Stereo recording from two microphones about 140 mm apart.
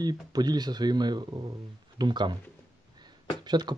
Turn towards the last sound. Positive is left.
turn(degrees=-30)  # may be behind; listen again after turning